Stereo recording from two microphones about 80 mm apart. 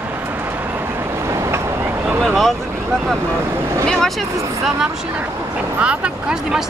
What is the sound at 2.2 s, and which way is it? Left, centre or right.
Vehicle, centre.